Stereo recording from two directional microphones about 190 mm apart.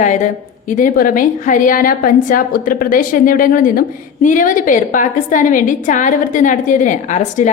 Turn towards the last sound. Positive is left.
turn(degrees=40)  # may be behind; listen again after turning